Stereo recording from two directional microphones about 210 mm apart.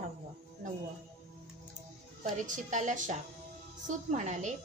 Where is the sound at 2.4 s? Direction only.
35° right (ahead or behind).